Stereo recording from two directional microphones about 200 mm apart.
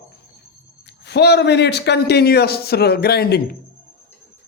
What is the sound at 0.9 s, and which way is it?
A man's voice, 55° left (ahead or behind).